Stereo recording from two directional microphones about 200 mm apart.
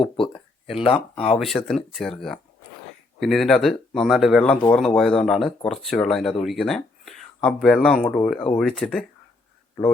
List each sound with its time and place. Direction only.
0.8 s speech: 30° left (ahead or behind)
1.4 s speech: centre (ahead or behind)